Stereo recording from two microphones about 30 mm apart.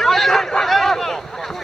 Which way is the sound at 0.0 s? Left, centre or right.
Centre.